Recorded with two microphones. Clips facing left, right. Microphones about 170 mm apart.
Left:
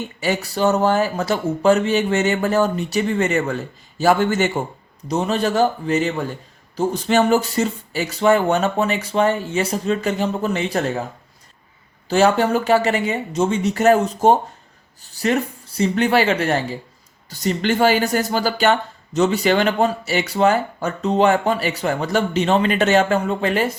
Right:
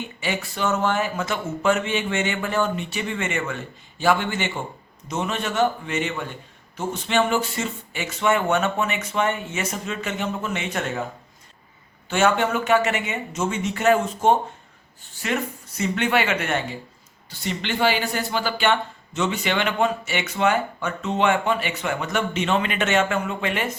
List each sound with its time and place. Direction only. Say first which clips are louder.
0.2 s speech: left 7 dB; 40° left (ahead or behind)
12.0 s speech: left 4 dB; 35° left (ahead or behind)